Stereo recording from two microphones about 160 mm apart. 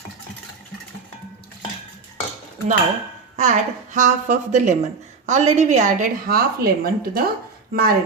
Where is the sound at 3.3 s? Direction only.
50° right (ahead or behind).